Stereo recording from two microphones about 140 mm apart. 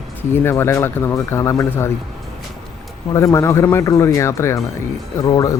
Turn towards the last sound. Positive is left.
turn(degrees=25)  # may be behind; listen again after turning